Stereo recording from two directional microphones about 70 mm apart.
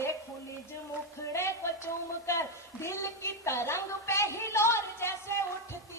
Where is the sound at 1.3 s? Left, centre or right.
Left.